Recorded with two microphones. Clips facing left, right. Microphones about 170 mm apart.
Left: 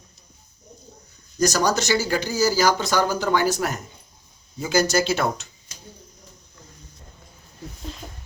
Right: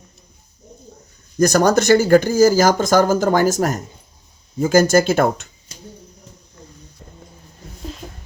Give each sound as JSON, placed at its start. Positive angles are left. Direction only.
{"t": 1.4, "sound": "speech", "side_deg": -55}